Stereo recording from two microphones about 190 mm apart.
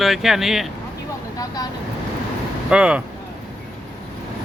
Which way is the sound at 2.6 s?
5° right (ahead or behind).